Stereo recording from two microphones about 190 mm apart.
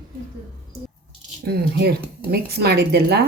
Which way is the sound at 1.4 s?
55° right (ahead or behind).